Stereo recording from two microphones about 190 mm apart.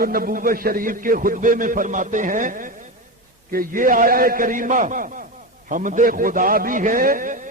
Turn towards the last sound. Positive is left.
turn(degrees=-45)  # may be behind; listen again after turning